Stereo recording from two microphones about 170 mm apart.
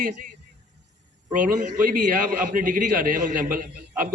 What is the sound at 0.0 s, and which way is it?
A man's voice, 50° right (ahead or behind).